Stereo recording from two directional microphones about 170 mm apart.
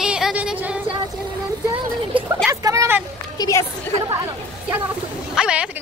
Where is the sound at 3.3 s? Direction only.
20° left (ahead or behind).